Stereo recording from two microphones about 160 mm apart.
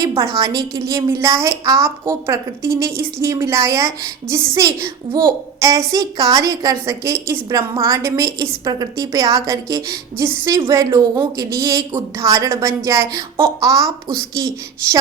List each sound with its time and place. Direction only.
0.3 s a woman's voice: 20° right (ahead or behind)